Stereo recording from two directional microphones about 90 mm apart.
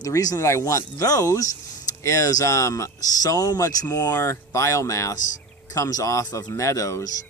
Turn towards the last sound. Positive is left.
turn(degrees=35)  # may be behind; listen again after turning